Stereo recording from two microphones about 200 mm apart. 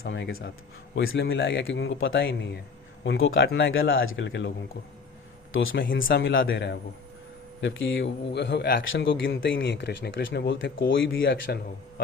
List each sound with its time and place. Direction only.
0.0 s speech: 55° left (ahead or behind); by 2.0 s 75° left (ahead or behind)
2.0 s speech: 60° left (ahead or behind)
3.0 s speech: 75° left (ahead or behind)
5.7 s speech: 50° left (ahead or behind)
6.2 s speech: 70° left (ahead or behind); by 8.8 s 55° left (ahead or behind)
8.9 s speech: 70° left (ahead or behind)
11.4 s a man's voice: 50° left (ahead or behind)